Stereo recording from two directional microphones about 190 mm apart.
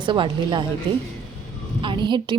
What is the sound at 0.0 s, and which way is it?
Speech, 25° right (ahead or behind).